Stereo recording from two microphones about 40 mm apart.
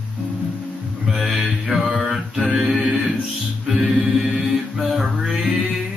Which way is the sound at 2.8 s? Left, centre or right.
Centre.